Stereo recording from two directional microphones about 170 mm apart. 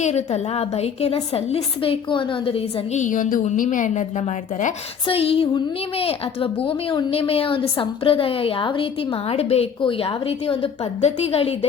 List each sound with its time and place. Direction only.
0.0 s a woman's voice: 40° left (ahead or behind)